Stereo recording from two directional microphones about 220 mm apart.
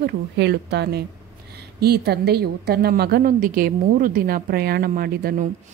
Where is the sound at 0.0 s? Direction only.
50° right (ahead or behind).